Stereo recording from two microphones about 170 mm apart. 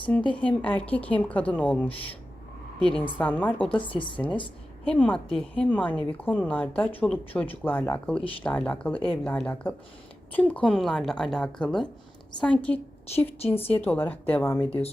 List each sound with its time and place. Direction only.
0.3 s a woman's voice: 10° left (ahead or behind)
14.7 s speech: 35° left (ahead or behind)